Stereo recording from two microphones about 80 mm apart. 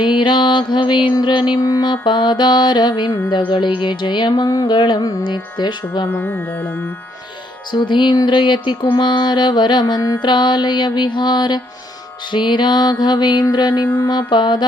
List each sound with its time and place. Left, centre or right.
0.0 s mantra: left
1.5 s mantra: left
1.8 s mantra: left
6.1 s music: centre
7.7 s mantra: left
13.5 s a sound: left
14.1 s mantra: left